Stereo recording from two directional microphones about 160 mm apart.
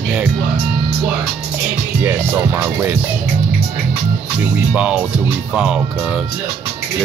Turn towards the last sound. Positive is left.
turn(degrees=-5)  # may be behind; listen again after turning